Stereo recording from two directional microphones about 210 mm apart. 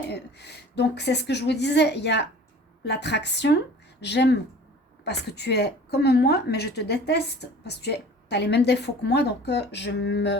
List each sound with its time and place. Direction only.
0.1 s a woman's voice: 55° left (ahead or behind)